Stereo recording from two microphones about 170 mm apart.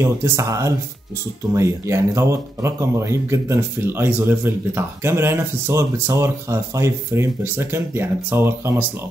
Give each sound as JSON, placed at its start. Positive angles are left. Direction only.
{"t": 0.0, "sound": "speech", "side_deg": -15}